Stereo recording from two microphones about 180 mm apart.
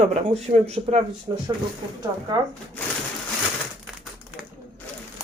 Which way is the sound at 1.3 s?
25° right (ahead or behind).